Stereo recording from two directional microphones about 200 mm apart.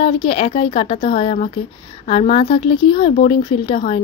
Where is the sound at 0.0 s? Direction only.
30° left (ahead or behind).